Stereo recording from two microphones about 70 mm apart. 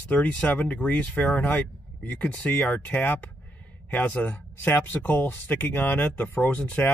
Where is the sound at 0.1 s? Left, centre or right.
Left.